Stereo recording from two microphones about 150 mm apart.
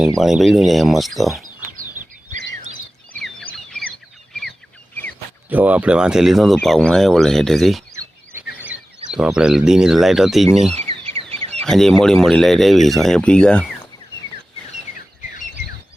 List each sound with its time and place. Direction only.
0.2 s speech: centre (ahead or behind)
3.2 s bird: 5° left (ahead or behind)
5.5 s speech: 10° right (ahead or behind)
10.8 s bird: 45° right (ahead or behind)
11.6 s speech: 5° left (ahead or behind)